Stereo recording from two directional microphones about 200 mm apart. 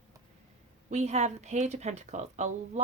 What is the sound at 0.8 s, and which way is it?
A woman's voice, 35° right (ahead or behind).